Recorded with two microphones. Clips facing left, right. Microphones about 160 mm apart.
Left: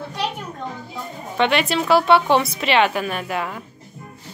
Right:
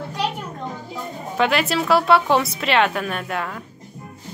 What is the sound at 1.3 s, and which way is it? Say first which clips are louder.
A woman's voice: left 1 dB; centre (ahead or behind).